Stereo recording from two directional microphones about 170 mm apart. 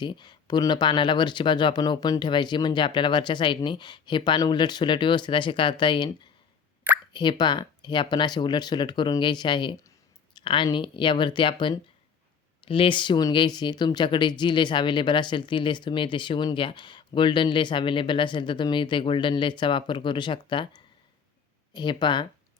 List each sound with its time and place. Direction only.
0.0 s speech: 25° left (ahead or behind)
21.7 s speech: 25° left (ahead or behind)